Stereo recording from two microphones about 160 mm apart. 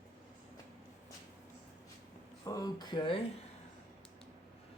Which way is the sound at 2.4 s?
20° left (ahead or behind).